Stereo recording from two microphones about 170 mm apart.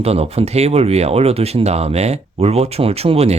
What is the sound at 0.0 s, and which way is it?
Speech, 35° right (ahead or behind).